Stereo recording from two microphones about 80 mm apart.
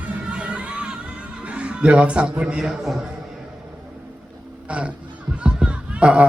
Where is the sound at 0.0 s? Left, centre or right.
Centre.